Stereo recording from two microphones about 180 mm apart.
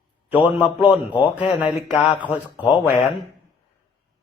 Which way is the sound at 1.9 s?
5° right (ahead or behind).